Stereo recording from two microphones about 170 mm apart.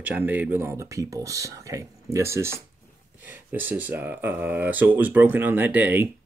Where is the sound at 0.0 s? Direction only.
10° right (ahead or behind).